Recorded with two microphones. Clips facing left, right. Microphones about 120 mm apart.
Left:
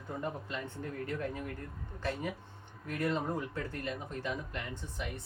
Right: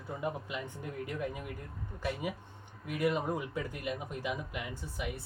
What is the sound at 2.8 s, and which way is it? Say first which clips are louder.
Speech: right 2 dB; 10° right (ahead or behind).